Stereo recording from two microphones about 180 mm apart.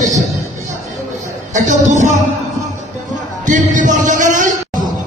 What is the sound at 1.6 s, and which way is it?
Speech, 40° right (ahead or behind).